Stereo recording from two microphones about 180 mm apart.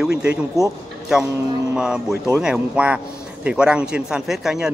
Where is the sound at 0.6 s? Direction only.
15° left (ahead or behind).